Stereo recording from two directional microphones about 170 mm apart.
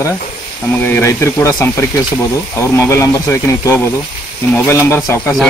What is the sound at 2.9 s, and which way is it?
Speech, 15° left (ahead or behind).